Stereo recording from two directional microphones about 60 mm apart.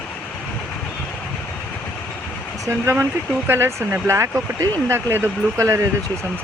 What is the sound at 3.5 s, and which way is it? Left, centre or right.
Speech, right.